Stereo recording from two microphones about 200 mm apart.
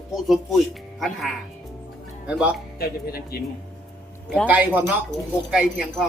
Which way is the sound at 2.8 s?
50° left (ahead or behind).